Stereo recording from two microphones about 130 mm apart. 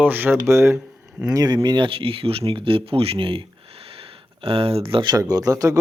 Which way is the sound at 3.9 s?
45° right (ahead or behind).